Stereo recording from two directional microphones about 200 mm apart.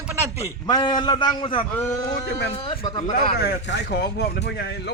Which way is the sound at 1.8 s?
15° left (ahead or behind).